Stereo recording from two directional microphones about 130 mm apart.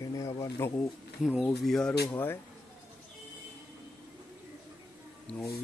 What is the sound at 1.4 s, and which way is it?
Speech, centre (ahead or behind).